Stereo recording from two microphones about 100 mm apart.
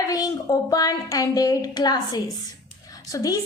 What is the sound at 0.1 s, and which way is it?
A woman's voice, 40° left (ahead or behind).